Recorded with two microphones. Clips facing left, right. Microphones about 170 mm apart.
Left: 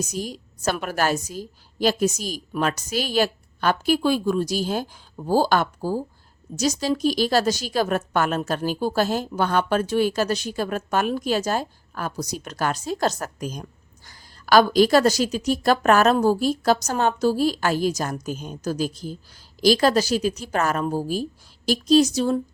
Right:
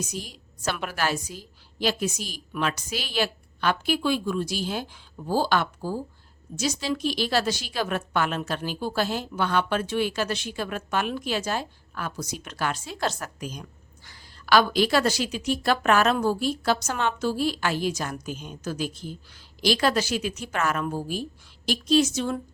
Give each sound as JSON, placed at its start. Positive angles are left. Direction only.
{"t": 0.0, "sound": "a woman's voice", "side_deg": 45}